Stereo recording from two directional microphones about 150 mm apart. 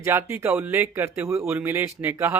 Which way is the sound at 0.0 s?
15° right (ahead or behind).